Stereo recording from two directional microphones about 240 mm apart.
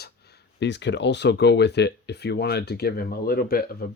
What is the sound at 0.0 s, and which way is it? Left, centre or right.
Speech, left.